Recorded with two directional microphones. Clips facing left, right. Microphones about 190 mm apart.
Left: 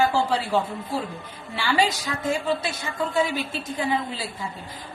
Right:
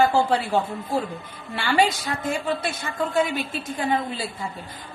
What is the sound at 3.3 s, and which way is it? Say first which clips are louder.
Speech: even; 50° right (ahead or behind).